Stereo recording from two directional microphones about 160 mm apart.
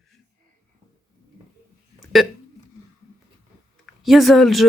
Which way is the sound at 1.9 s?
Centre (ahead or behind).